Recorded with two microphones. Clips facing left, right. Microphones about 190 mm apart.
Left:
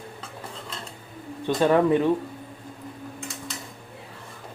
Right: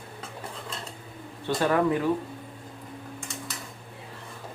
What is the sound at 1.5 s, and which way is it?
Speech, 20° left (ahead or behind).